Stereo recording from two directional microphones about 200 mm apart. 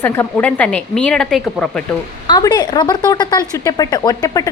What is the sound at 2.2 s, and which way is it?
Speech, 20° left (ahead or behind).